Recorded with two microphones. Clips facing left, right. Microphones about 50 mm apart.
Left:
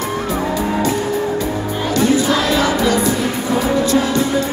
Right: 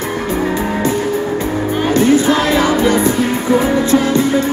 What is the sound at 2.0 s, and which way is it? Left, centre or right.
Music, right.